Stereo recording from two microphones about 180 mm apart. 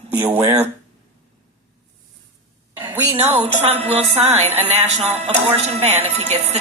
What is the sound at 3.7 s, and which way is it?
Speech, 35° right (ahead or behind).